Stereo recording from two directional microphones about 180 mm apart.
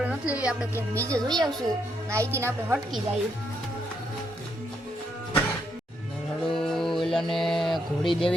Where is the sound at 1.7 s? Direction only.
15° right (ahead or behind).